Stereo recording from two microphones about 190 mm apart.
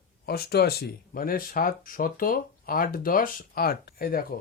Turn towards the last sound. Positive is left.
turn(degrees=50)  # may be behind; listen again after turning